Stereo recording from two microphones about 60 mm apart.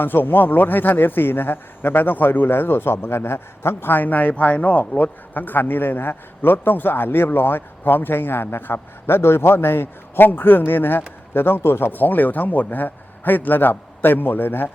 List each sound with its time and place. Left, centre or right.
0.0 s a man's voice: left